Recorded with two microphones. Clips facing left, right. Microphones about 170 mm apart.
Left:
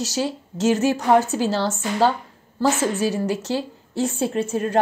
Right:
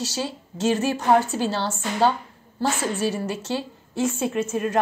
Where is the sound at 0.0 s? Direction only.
40° left (ahead or behind).